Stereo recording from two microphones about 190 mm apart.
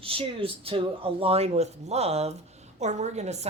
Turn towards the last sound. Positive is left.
turn(degrees=-35)  # may be behind; listen again after turning